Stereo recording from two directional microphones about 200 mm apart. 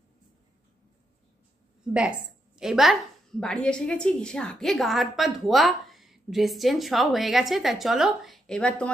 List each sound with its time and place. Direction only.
2.0 s a woman's voice: 5° right (ahead or behind)